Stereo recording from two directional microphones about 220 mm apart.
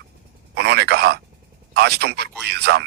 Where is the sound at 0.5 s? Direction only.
50° right (ahead or behind).